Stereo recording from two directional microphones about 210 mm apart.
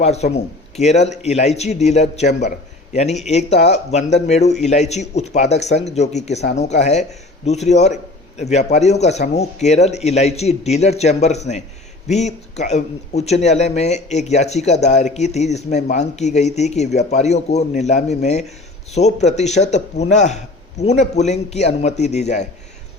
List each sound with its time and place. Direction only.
0.0 s a man's voice: 30° left (ahead or behind)